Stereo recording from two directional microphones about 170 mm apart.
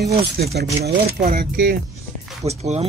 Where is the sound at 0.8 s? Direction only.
60° right (ahead or behind).